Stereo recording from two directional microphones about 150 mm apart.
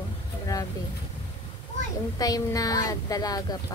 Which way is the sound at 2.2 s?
25° left (ahead or behind).